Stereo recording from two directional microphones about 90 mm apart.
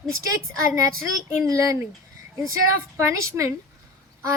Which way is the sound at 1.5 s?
35° right (ahead or behind).